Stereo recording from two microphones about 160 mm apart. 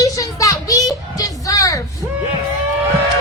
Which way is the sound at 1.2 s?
20° left (ahead or behind).